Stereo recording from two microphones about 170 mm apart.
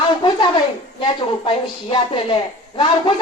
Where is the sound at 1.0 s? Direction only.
30° left (ahead or behind).